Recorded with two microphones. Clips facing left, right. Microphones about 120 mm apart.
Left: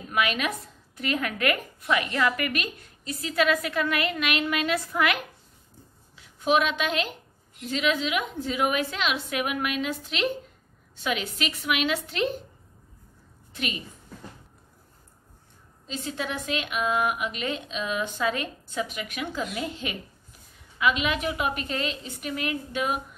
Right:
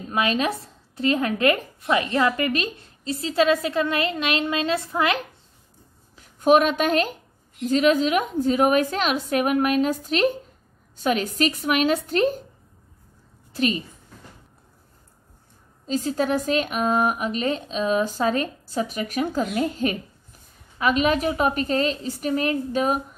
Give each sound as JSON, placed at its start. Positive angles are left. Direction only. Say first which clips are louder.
{"t": 0.1, "sound": "a woman's voice", "louder": "right 4 dB", "side_deg": -30}
{"t": 6.1, "sound": "a woman's voice", "louder": "right 6 dB", "side_deg": -45}
{"t": 13.5, "sound": "a sound", "louder": "right 10 dB", "side_deg": -35}
{"t": 15.9, "sound": "speech", "louder": "right 9 dB", "side_deg": -40}